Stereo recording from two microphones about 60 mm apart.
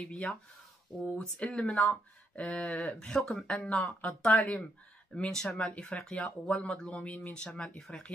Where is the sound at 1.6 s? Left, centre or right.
Centre.